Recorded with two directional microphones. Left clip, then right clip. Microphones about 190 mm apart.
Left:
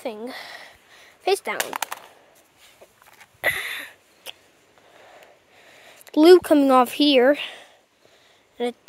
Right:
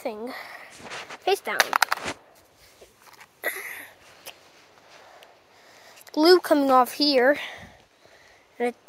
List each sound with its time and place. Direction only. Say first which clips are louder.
0.0 s a sound: left 1 dB; 15° left (ahead or behind)
1.2 s speech: left 2 dB; 15° left (ahead or behind)
1.6 s speech: right 7 dB; 10° right (ahead or behind)
3.6 s a sound: left 6 dB; 40° left (ahead or behind)
5.9 s speech: left 5 dB; 40° left (ahead or behind)
8.6 s speech: even; 15° left (ahead or behind)